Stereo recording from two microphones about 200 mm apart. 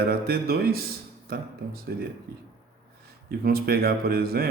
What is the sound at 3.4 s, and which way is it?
Speech, 50° right (ahead or behind).